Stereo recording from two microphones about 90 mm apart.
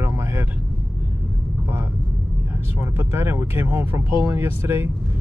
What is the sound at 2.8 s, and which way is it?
Speech, 25° right (ahead or behind).